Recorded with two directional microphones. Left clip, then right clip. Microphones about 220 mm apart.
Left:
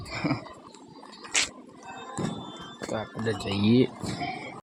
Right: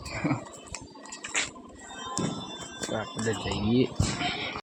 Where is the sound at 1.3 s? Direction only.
10° left (ahead or behind).